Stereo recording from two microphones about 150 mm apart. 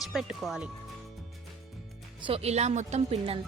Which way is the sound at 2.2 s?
40° right (ahead or behind).